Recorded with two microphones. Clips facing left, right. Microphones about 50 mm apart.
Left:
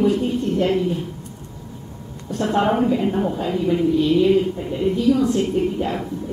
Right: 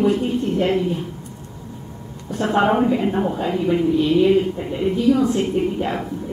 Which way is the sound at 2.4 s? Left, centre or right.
Centre.